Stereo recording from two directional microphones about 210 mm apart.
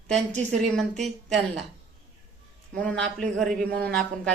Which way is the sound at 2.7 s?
5° left (ahead or behind).